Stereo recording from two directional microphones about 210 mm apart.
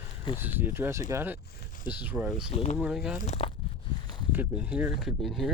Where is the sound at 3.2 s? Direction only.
30° left (ahead or behind).